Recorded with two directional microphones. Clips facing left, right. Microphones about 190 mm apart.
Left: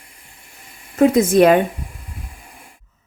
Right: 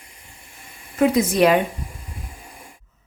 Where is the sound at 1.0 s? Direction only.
50° left (ahead or behind).